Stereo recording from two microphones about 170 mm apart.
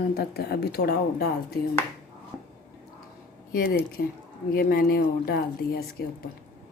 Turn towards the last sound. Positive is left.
turn(degrees=65)  # may be behind; listen again after turning